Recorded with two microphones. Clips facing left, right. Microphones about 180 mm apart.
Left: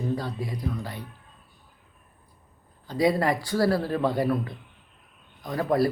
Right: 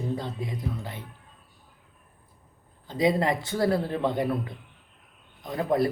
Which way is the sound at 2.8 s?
20° right (ahead or behind).